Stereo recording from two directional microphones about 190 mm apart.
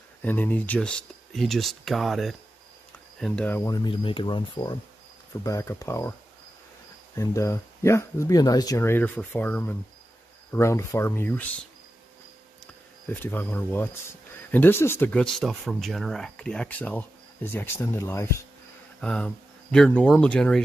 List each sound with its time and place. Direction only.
0.2 s speech: 10° left (ahead or behind)
3.7 s speech: 25° left (ahead or behind)
7.2 s speech: 15° left (ahead or behind)
13.1 s speech: 10° left (ahead or behind)
18.9 s speech: 5° left (ahead or behind)